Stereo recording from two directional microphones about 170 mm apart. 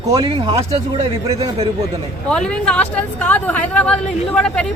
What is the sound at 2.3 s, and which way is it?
Speech, 5° left (ahead or behind).